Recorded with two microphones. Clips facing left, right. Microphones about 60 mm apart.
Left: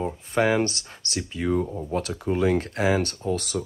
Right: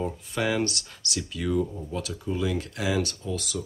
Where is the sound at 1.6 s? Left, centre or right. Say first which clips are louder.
Left 3 dB; left.